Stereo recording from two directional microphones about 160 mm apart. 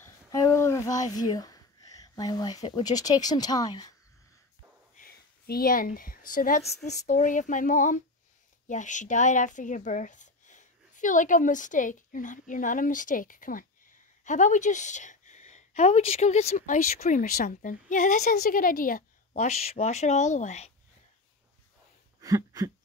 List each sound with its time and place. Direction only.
0.0 s speech: 20° left (ahead or behind)
4.9 s a woman's voice: 65° left (ahead or behind)
6.6 s a woman's voice: 45° left (ahead or behind)
17.2 s speech: 65° left (ahead or behind); by 18.4 s 50° left (ahead or behind)
18.4 s a woman's voice: 60° left (ahead or behind)
19.4 s speech: 40° left (ahead or behind)
22.2 s a sound: 25° right (ahead or behind)